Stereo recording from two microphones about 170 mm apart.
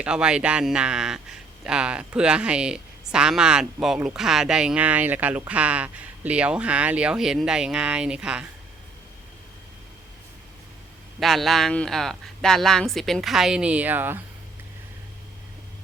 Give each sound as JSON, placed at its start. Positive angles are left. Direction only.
{"t": 0.0, "sound": "a man's voice", "side_deg": -5}
{"t": 11.2, "sound": "a man's voice", "side_deg": 0}